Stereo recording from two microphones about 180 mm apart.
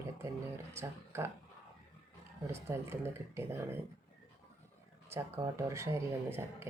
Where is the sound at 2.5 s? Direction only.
15° right (ahead or behind).